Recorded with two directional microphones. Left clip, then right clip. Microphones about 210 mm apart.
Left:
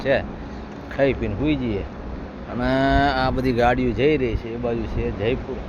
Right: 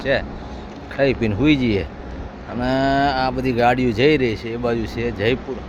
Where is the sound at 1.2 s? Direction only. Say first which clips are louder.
Right 6 dB; 30° right (ahead or behind).